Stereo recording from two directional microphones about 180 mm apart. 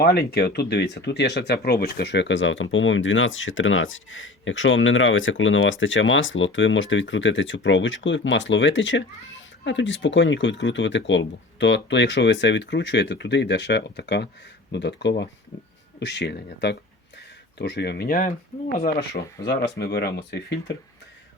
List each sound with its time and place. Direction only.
0.0 s speech: 60° left (ahead or behind)
19.8 s speech: 65° left (ahead or behind)